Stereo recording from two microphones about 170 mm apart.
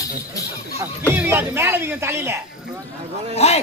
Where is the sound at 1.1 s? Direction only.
10° right (ahead or behind).